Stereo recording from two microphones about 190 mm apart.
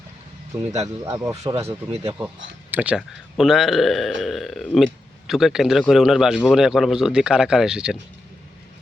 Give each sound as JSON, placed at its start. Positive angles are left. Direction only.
{"t": 0.8, "sound": "speech", "side_deg": -15}